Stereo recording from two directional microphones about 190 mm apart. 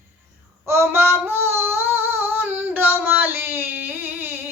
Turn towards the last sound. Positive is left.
turn(degrees=-10)  # may be behind; listen again after turning